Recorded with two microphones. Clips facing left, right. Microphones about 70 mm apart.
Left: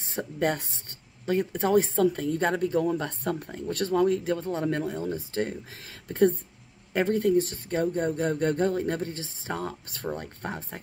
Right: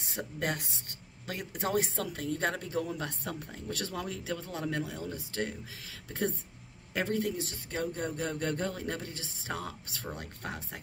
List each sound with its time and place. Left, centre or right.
0.0 s speech: left